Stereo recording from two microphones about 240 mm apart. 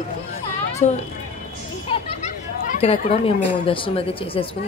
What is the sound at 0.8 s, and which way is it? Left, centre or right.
Speech, left.